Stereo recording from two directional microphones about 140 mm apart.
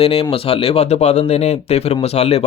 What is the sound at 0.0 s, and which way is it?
Speech, 45° left (ahead or behind).